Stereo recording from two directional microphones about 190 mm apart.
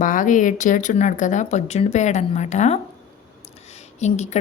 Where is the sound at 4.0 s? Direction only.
35° left (ahead or behind).